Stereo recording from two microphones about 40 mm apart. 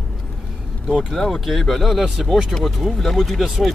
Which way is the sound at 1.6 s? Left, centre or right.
Centre.